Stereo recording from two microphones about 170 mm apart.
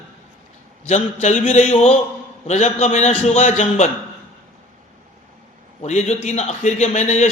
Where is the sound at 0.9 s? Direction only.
40° left (ahead or behind).